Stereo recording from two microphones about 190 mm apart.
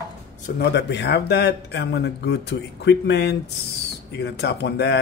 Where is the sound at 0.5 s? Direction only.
60° left (ahead or behind).